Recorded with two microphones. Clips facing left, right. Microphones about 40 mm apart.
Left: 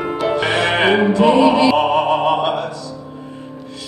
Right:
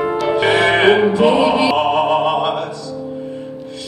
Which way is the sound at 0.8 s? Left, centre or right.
Centre.